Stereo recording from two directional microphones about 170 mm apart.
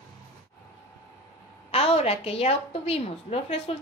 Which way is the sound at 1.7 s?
35° left (ahead or behind).